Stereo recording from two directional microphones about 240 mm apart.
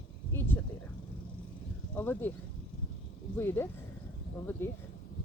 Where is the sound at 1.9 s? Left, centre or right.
Centre.